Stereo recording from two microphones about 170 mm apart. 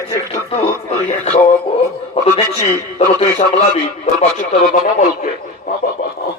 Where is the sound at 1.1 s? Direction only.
50° left (ahead or behind).